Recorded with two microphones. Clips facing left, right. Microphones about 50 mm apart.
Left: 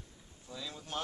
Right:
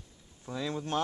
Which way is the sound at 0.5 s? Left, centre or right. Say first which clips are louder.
Right 9 dB; right.